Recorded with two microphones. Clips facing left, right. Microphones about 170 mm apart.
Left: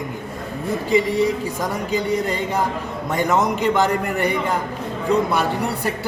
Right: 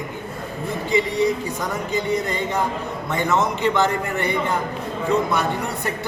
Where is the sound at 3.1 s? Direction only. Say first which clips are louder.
Left 2 dB; 40° left (ahead or behind).